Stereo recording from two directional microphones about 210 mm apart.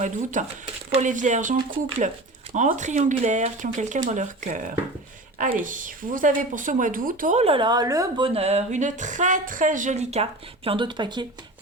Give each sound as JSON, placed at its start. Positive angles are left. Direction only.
{"t": 0.0, "sound": "a woman's voice", "side_deg": -35}